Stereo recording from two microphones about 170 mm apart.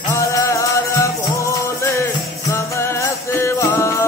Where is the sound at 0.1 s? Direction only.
20° left (ahead or behind).